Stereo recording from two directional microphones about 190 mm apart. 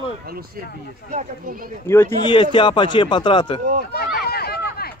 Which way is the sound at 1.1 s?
45° right (ahead or behind).